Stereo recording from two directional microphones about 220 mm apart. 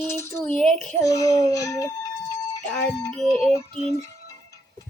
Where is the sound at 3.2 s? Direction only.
Centre (ahead or behind).